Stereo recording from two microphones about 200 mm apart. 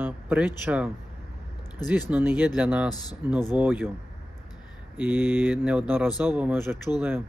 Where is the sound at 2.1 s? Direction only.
10° right (ahead or behind).